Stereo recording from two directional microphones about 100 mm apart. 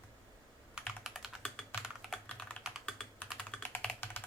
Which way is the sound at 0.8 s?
Centre (ahead or behind).